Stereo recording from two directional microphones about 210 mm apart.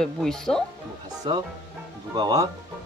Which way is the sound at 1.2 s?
25° right (ahead or behind).